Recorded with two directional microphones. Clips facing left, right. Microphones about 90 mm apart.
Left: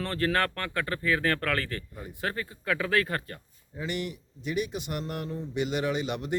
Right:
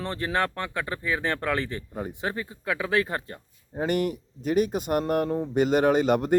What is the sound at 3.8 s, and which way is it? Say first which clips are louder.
Speech: right 8 dB; 45° right (ahead or behind).